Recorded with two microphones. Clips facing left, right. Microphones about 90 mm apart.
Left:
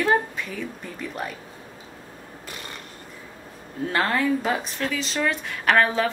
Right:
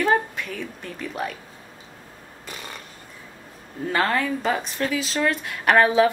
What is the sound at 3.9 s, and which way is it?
A woman's voice, centre (ahead or behind).